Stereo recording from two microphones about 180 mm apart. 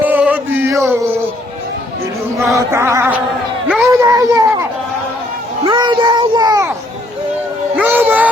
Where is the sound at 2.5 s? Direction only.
15° right (ahead or behind).